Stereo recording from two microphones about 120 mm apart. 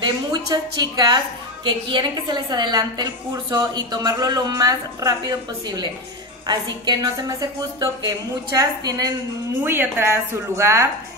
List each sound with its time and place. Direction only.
0.0 s a woman's voice: 35° right (ahead or behind)
9.6 s a woman's voice: 20° right (ahead or behind)